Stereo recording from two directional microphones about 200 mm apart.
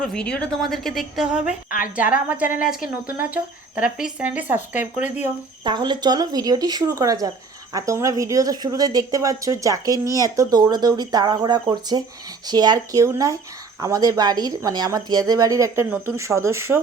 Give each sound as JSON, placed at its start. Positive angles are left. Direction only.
{"t": 0.0, "sound": "a woman's voice", "side_deg": 5}
{"t": 5.6, "sound": "speech", "side_deg": -20}